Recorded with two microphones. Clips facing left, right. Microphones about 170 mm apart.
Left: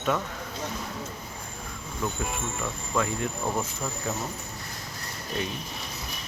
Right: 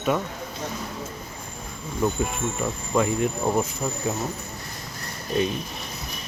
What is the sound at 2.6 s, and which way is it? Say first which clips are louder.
Speech: right 5 dB; 20° right (ahead or behind).